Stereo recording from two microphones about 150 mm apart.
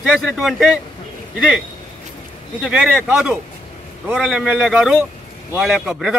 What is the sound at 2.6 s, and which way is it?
Speech, 10° right (ahead or behind).